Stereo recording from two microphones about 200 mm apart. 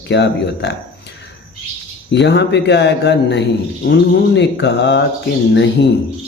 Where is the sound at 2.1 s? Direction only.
60° left (ahead or behind).